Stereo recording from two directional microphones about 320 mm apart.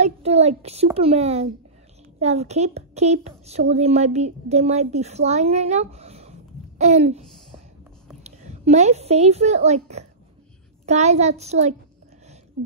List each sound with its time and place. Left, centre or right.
0.0 s a woman's voice: centre
8.5 s a woman's voice: right